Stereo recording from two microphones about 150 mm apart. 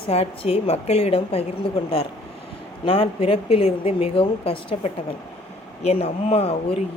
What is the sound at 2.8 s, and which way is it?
A woman's voice, 40° left (ahead or behind).